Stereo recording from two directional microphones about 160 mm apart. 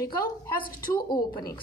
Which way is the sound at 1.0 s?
25° left (ahead or behind).